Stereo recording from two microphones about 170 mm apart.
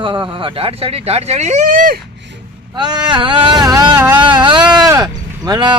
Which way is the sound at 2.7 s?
25° right (ahead or behind).